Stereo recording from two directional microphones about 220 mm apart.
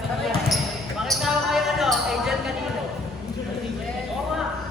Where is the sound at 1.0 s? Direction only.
Centre (ahead or behind).